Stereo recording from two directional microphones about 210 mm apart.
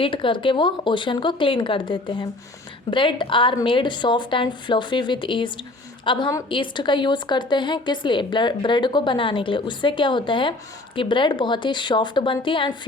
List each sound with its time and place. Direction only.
0.0 s a woman's voice: 25° left (ahead or behind)